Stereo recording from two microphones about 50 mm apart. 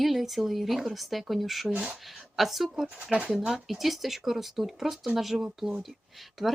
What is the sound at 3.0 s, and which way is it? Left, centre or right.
Speech, right.